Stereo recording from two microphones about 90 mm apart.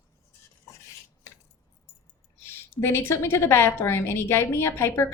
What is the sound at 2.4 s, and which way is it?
Speech, 25° left (ahead or behind).